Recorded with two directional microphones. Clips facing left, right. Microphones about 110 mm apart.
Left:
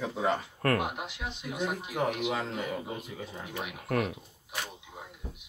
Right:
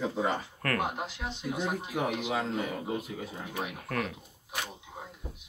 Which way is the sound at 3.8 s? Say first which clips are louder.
Left 6 dB; 25° left (ahead or behind).